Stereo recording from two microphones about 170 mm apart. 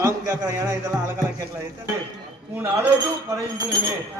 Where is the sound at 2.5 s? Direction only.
15° right (ahead or behind).